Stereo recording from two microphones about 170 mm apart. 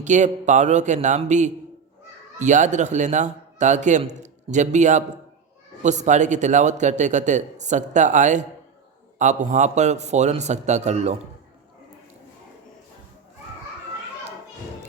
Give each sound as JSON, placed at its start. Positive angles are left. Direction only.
{"t": 0.0, "sound": "a man's voice", "side_deg": -45}